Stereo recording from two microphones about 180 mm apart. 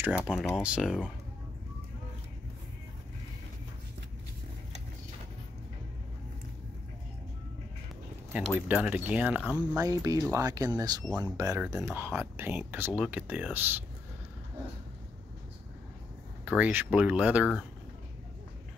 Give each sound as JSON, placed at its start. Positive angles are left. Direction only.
{"t": 0.0, "sound": "speech", "side_deg": -5}
{"t": 8.3, "sound": "speech", "side_deg": -10}
{"t": 9.8, "sound": "speech", "side_deg": -20}
{"t": 16.4, "sound": "speech", "side_deg": -10}